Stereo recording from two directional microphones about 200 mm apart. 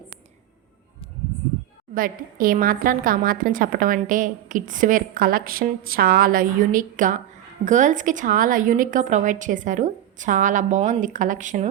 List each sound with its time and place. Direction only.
2.0 s a woman's voice: 45° right (ahead or behind)